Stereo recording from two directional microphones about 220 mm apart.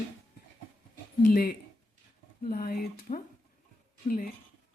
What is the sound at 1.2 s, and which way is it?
Speech, 40° left (ahead or behind).